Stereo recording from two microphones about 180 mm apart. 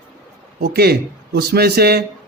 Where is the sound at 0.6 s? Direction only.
65° right (ahead or behind).